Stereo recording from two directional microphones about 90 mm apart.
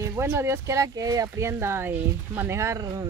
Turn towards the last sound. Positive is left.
turn(degrees=-35)  # may be behind; listen again after turning